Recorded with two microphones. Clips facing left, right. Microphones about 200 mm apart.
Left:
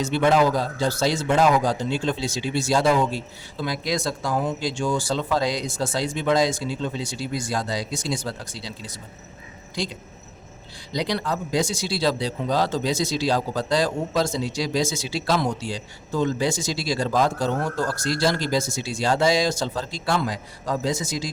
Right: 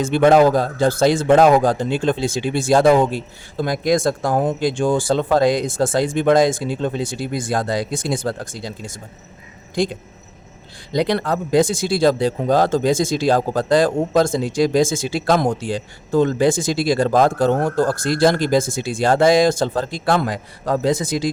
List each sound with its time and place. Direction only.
0.0 s speech: 50° right (ahead or behind)